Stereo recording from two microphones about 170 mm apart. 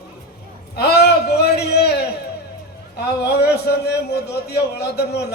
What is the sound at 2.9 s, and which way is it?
A man's voice, 70° left (ahead or behind).